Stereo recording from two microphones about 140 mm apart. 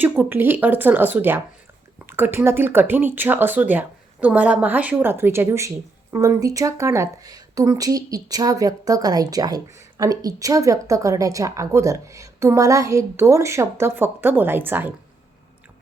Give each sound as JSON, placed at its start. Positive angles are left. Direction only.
{"t": 0.0, "sound": "speech", "side_deg": -15}